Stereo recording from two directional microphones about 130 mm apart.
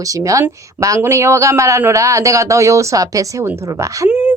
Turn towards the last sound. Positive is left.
turn(degrees=-10)  # may be behind; listen again after turning